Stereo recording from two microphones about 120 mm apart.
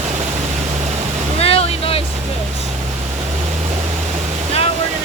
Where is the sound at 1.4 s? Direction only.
55° left (ahead or behind).